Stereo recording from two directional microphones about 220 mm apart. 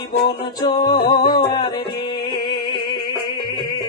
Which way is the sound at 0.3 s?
20° left (ahead or behind).